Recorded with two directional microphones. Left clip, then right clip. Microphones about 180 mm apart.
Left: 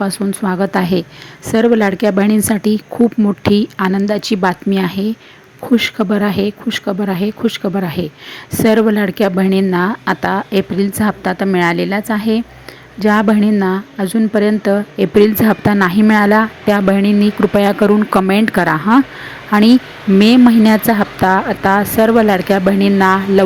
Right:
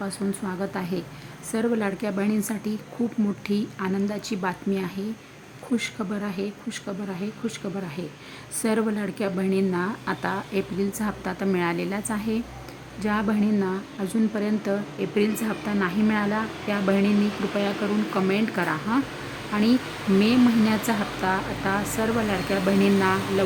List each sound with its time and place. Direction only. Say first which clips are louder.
0.0 s a woman's voice: left 12 dB; 35° left (ahead or behind)
18.1 s a woman's voice: left 12 dB; 45° left (ahead or behind)
20.1 s a woman's voice: left 12 dB; 40° left (ahead or behind)